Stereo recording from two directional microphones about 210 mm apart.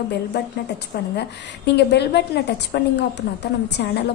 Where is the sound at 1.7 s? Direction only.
55° left (ahead or behind).